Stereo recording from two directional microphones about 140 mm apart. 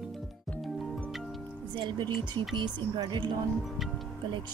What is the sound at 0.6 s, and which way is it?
Music, centre (ahead or behind).